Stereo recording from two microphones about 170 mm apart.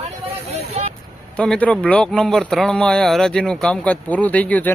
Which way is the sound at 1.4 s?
5° left (ahead or behind).